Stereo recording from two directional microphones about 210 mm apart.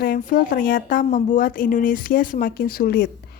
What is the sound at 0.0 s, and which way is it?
A woman's voice, 40° left (ahead or behind).